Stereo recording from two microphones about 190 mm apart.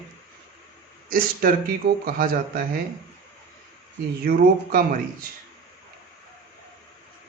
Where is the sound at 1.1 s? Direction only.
50° right (ahead or behind).